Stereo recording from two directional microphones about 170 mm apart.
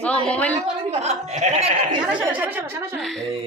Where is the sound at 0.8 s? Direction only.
40° right (ahead or behind).